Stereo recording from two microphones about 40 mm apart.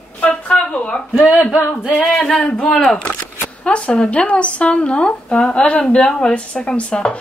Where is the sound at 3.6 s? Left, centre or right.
Left.